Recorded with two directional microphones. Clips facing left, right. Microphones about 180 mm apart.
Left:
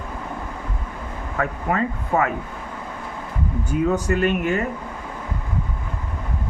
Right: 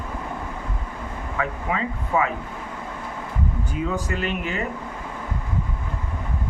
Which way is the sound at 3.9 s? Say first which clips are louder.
Left 6 dB; 50° left (ahead or behind).